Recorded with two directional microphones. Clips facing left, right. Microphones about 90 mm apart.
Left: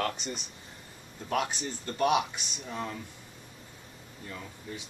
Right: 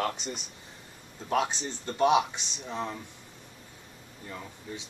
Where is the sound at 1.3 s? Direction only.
25° right (ahead or behind).